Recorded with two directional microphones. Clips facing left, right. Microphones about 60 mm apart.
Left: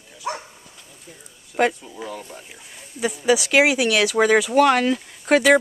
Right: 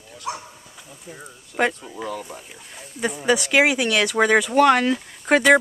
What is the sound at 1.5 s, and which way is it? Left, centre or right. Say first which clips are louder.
Speech: left 2 dB; centre.